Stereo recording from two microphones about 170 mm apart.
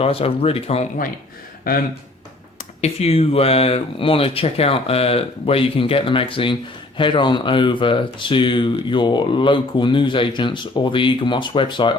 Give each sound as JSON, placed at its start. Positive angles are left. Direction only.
{"t": 0.0, "sound": "speech", "side_deg": 35}
{"t": 1.7, "sound": "speech", "side_deg": 55}
{"t": 2.8, "sound": "speech", "side_deg": 35}